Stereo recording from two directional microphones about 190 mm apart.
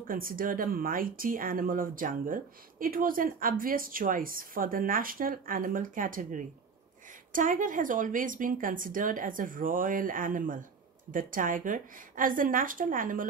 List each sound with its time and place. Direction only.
0.1 s speech: 50° right (ahead or behind)